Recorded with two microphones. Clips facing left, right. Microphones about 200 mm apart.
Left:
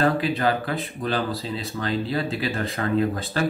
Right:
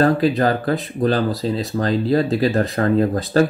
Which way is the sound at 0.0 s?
40° right (ahead or behind).